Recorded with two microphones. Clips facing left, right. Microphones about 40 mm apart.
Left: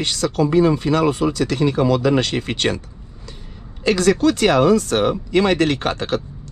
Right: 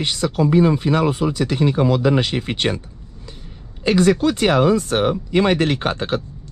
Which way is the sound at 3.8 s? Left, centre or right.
Centre.